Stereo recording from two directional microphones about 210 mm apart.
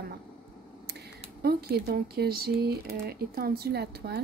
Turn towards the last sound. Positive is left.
turn(degrees=-50)  # may be behind; listen again after turning